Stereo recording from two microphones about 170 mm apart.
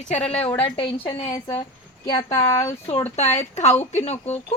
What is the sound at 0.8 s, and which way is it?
A woman's voice, 30° left (ahead or behind).